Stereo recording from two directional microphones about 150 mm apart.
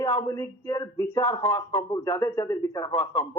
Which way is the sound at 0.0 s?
25° left (ahead or behind).